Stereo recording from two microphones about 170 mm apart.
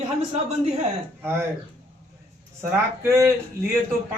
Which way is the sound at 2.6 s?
15° right (ahead or behind).